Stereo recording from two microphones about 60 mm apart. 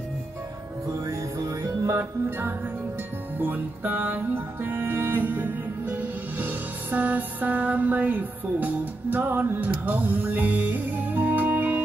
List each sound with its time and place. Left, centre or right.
1.0 s music: right